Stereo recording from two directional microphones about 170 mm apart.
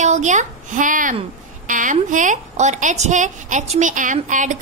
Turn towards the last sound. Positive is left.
turn(degrees=-50)  # may be behind; listen again after turning